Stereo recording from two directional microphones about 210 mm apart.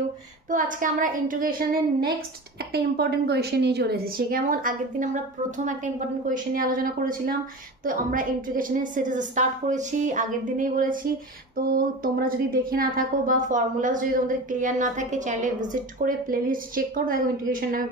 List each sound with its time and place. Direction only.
0.5 s a woman's voice: 40° right (ahead or behind)